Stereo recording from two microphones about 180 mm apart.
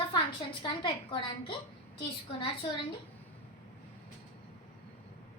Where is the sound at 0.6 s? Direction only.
25° left (ahead or behind).